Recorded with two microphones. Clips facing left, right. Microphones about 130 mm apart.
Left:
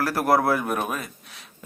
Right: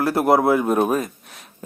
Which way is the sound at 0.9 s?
45° right (ahead or behind).